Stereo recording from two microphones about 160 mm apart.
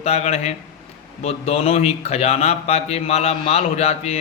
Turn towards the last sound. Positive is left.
turn(degrees=40)  # may be behind; listen again after turning